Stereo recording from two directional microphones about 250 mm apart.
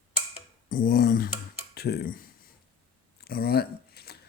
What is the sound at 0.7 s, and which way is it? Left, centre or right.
Speech, left.